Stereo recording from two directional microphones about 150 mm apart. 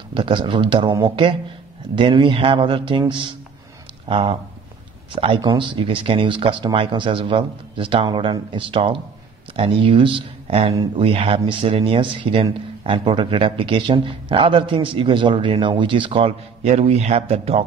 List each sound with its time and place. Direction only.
0.1 s speech: 35° right (ahead or behind)